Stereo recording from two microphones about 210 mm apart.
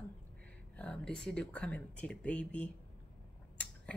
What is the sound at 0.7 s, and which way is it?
Speech, 5° left (ahead or behind).